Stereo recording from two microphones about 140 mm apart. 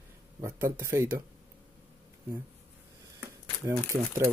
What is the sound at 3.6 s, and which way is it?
Speech, 25° right (ahead or behind).